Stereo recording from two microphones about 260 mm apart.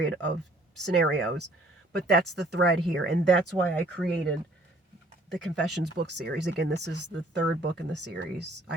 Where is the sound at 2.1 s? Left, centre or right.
Right.